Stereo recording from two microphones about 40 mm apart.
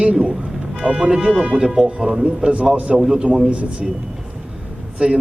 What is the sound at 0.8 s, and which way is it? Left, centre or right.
A man's voice, right.